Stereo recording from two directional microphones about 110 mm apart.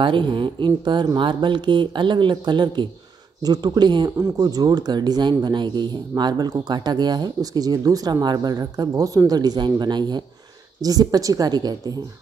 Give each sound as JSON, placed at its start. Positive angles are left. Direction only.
{"t": 0.0, "sound": "speech", "side_deg": -50}